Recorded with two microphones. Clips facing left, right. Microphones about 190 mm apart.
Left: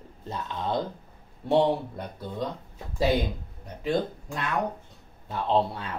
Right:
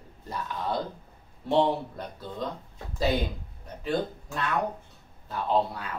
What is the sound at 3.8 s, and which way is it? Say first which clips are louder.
Speech: left 2 dB; 15° left (ahead or behind).